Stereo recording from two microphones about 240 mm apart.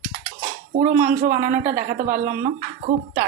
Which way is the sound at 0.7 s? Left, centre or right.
Right.